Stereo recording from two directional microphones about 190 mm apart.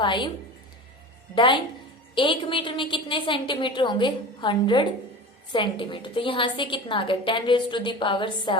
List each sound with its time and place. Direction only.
0.0 s a woman's voice: 25° left (ahead or behind)
2.1 s a woman's voice: 25° left (ahead or behind)